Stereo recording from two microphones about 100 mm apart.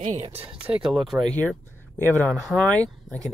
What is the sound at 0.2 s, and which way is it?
Speech, 75° right (ahead or behind).